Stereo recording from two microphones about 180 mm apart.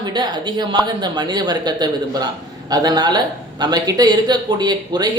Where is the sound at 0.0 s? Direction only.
25° right (ahead or behind).